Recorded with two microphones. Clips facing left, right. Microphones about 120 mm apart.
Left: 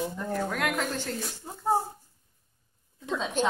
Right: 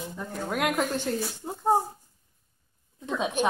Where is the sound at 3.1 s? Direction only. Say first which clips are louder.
Right 2 dB; 15° right (ahead or behind).